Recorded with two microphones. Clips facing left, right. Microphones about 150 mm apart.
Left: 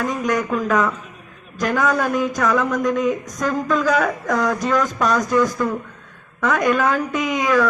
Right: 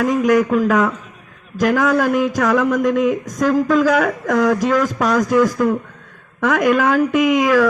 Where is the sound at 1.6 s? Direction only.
90° right.